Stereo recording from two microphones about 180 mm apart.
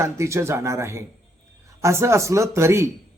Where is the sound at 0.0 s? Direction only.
15° right (ahead or behind).